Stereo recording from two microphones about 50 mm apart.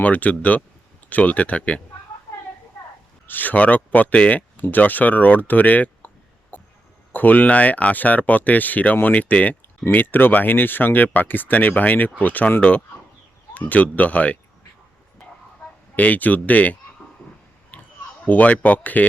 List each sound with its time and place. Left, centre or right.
0.0 s speech: left
3.2 s speech: left
6.5 s cough: left
7.1 s speech: left
9.9 s speech: left
16.0 s speech: left
17.7 s a sound: left
18.3 s speech: left